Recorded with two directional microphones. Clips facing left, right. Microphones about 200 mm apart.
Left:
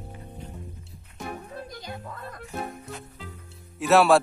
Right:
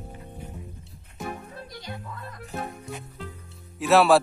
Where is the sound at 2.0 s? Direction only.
45° left (ahead or behind).